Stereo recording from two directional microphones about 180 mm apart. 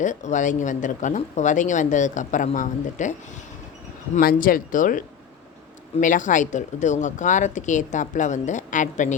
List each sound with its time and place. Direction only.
0.0 s speech: 40° left (ahead or behind)
4.2 s speech: 55° left (ahead or behind)